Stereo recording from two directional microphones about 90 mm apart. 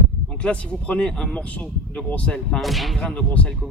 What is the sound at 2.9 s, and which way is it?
Speech, 10° left (ahead or behind).